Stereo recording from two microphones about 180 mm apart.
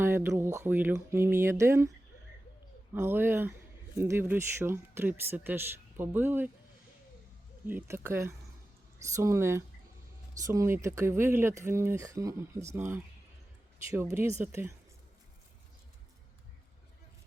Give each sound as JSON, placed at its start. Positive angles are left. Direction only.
{"t": 0.0, "sound": "speech", "side_deg": -15}
{"t": 2.9, "sound": "speech", "side_deg": -10}
{"t": 7.7, "sound": "speech", "side_deg": -10}